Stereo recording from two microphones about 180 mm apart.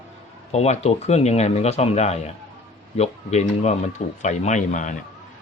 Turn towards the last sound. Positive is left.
turn(degrees=45)  # may be behind; listen again after turning